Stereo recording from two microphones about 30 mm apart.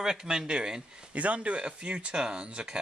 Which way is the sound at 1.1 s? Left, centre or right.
Right.